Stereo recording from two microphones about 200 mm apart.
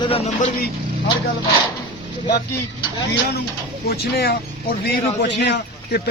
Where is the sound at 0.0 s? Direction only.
35° left (ahead or behind).